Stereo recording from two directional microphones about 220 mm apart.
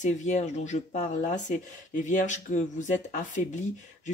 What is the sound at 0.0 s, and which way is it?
Speech, 35° left (ahead or behind).